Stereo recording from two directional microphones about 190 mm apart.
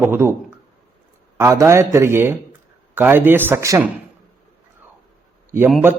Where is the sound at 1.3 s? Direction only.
15° right (ahead or behind).